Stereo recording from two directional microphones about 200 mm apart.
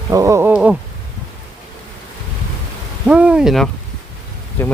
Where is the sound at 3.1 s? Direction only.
5° right (ahead or behind).